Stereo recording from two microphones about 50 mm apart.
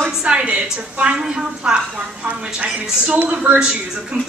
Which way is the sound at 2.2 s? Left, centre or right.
Right.